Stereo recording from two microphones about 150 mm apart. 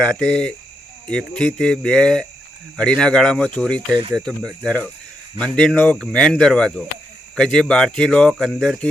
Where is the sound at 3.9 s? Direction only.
30° right (ahead or behind).